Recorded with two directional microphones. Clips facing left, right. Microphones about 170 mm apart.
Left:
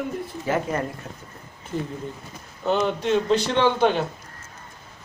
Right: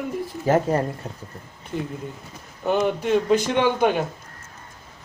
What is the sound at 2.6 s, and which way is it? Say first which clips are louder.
Speech: right 1 dB; 10° right (ahead or behind).